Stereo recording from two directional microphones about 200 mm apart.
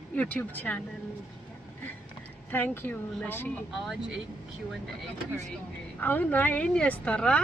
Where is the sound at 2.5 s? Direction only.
10° left (ahead or behind).